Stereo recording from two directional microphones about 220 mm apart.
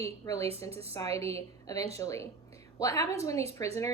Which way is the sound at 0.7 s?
25° right (ahead or behind).